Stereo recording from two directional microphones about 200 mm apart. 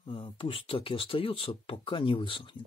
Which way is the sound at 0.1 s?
25° left (ahead or behind).